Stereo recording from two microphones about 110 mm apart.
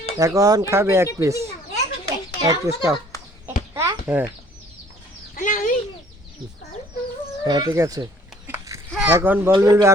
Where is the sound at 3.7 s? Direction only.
20° right (ahead or behind).